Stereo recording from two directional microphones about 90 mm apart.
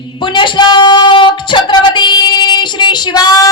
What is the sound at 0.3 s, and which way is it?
Female singing, 60° left (ahead or behind).